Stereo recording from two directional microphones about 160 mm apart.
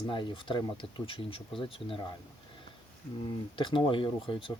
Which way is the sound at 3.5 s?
30° left (ahead or behind).